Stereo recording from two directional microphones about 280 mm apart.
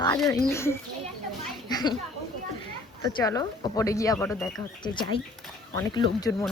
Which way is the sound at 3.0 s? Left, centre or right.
Centre.